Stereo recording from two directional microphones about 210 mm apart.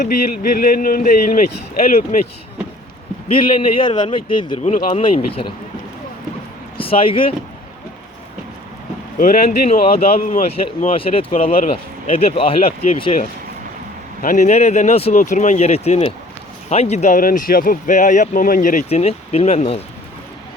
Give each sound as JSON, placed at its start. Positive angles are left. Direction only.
{"t": 0.0, "sound": "speech", "side_deg": 45}
{"t": 3.3, "sound": "a man's voice", "side_deg": 25}
{"t": 4.7, "sound": "speech", "side_deg": 35}
{"t": 5.0, "sound": "a man's voice", "side_deg": 25}
{"t": 6.7, "sound": "speech", "side_deg": 25}
{"t": 9.1, "sound": "a man's voice", "side_deg": 40}
{"t": 14.2, "sound": "speech", "side_deg": 40}